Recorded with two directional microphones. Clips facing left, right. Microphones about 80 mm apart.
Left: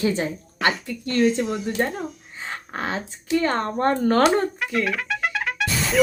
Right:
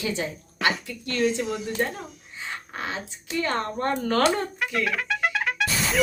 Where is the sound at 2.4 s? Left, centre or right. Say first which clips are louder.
Left 4 dB; left.